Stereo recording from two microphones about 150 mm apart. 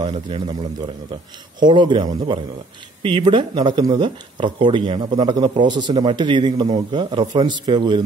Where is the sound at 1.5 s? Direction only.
30° right (ahead or behind).